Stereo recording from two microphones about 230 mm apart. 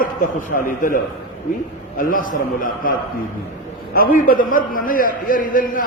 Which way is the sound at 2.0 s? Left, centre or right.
Left.